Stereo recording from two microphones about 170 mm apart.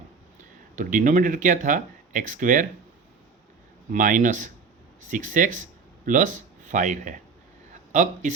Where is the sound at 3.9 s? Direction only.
50° right (ahead or behind).